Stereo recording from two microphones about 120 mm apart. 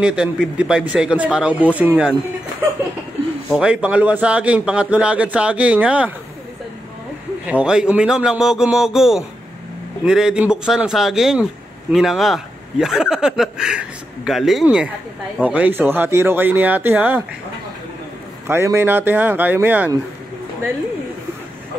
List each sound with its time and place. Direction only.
0.0 s a man's voice: 5° right (ahead or behind)
3.4 s a man's voice: 5° right (ahead or behind)
7.4 s a man's voice: 10° right (ahead or behind)
18.5 s a man's voice: 20° right (ahead or behind)